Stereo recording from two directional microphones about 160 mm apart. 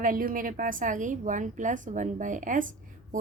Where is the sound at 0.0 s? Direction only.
60° right (ahead or behind).